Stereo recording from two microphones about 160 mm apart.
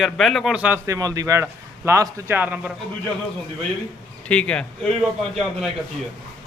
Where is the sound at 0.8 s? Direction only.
20° right (ahead or behind).